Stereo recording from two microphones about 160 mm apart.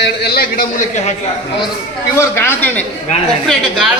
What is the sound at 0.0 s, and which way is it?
Speech, 85° left.